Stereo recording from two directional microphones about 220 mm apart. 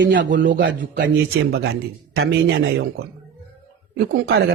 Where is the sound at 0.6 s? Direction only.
55° right (ahead or behind).